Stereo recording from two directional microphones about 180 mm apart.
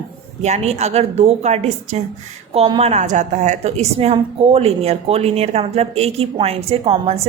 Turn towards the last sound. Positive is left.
turn(degrees=-35)  # may be behind; listen again after turning